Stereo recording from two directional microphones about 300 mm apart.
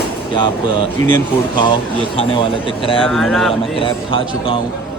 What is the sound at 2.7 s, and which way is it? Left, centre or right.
Speech, centre.